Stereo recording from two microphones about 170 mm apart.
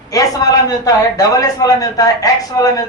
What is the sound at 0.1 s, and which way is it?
A man's voice, 20° left (ahead or behind).